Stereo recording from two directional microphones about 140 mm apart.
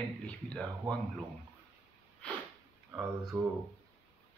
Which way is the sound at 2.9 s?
15° right (ahead or behind).